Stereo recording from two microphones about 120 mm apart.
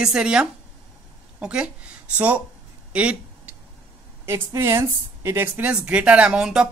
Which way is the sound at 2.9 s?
10° right (ahead or behind).